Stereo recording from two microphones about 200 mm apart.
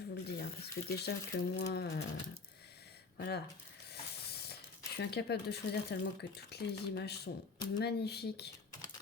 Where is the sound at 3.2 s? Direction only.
55° left (ahead or behind).